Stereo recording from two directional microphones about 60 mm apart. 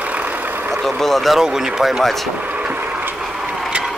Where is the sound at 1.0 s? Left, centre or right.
Centre.